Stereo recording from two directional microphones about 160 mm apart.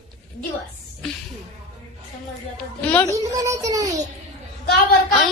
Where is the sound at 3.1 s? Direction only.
20° right (ahead or behind).